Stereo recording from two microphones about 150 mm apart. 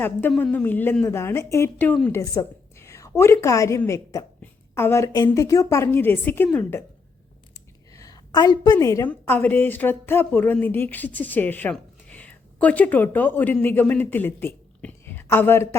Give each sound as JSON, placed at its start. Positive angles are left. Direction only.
{"t": 0.0, "sound": "a woman's voice", "side_deg": 10}
{"t": 2.3, "sound": "a woman's voice", "side_deg": 20}
{"t": 7.9, "sound": "a woman's voice", "side_deg": 25}